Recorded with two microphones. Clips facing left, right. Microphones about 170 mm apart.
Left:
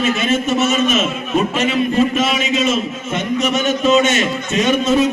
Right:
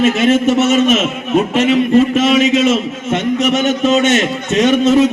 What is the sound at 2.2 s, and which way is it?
A man's voice, 75° right (ahead or behind).